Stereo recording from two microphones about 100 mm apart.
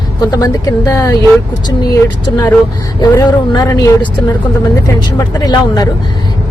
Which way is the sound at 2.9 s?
40° left (ahead or behind).